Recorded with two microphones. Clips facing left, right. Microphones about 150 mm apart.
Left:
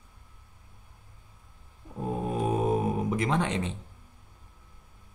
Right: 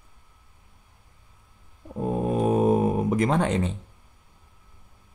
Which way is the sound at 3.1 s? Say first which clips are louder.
Right 5 dB; 45° right (ahead or behind).